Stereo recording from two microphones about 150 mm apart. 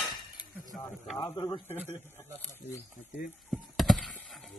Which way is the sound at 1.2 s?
25° left (ahead or behind).